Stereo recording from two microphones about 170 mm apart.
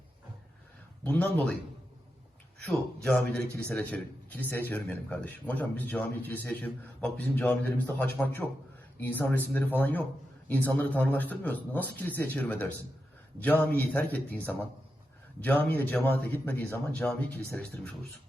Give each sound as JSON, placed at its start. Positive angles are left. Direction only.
{"t": 1.0, "sound": "a man's voice", "side_deg": 10}
{"t": 2.6, "sound": "a man's voice", "side_deg": 5}